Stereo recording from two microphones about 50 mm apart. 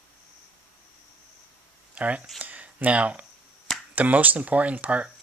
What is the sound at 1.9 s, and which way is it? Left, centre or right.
Speech, right.